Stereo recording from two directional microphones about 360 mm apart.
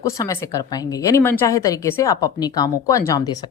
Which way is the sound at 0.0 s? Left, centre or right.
Centre.